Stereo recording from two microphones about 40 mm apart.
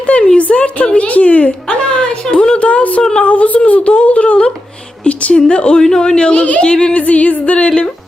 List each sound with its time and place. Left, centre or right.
0.0 s a sound: left
0.9 s a woman's voice: left
1.9 s a sound: centre
2.6 s speech: left
3.0 s speech: centre
3.2 s a woman's voice: left
5.8 s a man's voice: centre
7.0 s a woman's voice: left